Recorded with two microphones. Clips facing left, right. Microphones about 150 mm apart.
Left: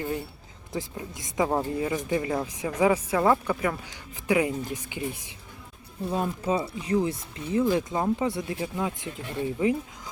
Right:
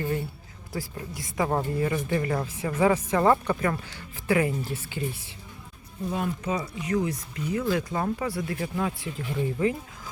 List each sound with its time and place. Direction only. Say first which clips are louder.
0.7 s speech: left 1 dB; 20° left (ahead or behind)
1.5 s speech: right 3 dB; 10° left (ahead or behind)
6.1 s speech: left 3 dB; 30° left (ahead or behind)